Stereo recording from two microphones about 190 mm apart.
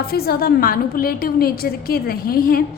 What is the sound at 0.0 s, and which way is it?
A woman's voice, 55° left (ahead or behind).